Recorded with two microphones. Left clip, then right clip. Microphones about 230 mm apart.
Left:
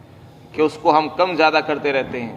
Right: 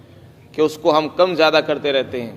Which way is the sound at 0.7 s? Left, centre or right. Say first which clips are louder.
Left 2 dB; right.